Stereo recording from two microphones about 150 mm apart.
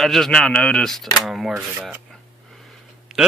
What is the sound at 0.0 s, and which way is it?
Speech, centre (ahead or behind).